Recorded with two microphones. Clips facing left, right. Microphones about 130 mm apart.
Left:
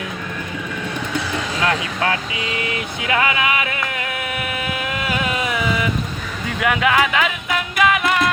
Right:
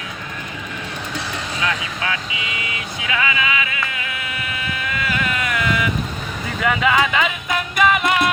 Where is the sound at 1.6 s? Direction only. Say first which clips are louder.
Left 4 dB; 40° left (ahead or behind).